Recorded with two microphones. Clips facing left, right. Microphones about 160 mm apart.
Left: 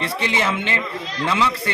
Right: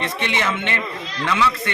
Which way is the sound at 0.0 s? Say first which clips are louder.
Left 1 dB; 30° left (ahead or behind).